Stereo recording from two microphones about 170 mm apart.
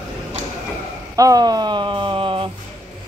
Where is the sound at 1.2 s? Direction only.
20° right (ahead or behind).